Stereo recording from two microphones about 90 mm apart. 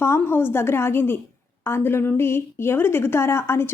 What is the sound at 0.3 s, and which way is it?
A woman's voice, 25° left (ahead or behind).